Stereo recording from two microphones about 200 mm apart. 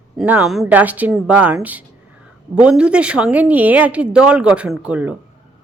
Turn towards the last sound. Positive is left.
turn(degrees=-5)  # may be behind; listen again after turning